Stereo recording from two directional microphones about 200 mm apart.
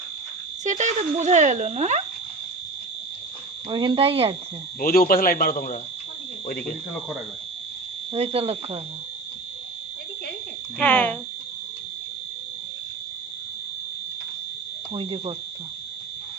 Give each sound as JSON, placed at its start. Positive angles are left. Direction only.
{"t": 0.6, "sound": "speech", "side_deg": -35}
{"t": 3.7, "sound": "speech", "side_deg": -25}
{"t": 4.8, "sound": "a man's voice", "side_deg": 45}
{"t": 8.1, "sound": "speech", "side_deg": -30}
{"t": 10.8, "sound": "speech", "side_deg": 5}
{"t": 14.9, "sound": "speech", "side_deg": -25}